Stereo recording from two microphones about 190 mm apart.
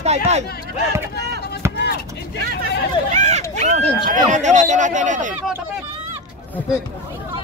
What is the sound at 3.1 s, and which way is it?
Speech, 40° right (ahead or behind).